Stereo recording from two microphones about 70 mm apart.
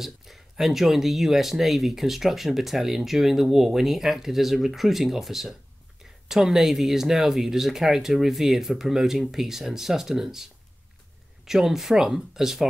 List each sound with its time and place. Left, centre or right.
0.0 s speech: centre